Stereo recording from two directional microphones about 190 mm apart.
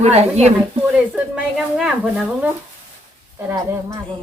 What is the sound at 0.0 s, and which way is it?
Speech, 35° right (ahead or behind).